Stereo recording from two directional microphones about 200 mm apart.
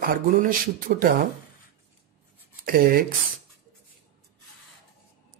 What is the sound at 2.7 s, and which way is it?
Speech, 45° right (ahead or behind).